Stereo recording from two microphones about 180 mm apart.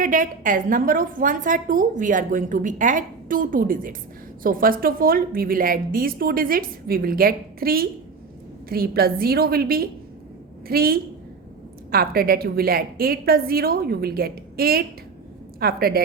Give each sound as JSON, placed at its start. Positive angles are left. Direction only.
{"t": 0.0, "sound": "a woman's voice", "side_deg": -45}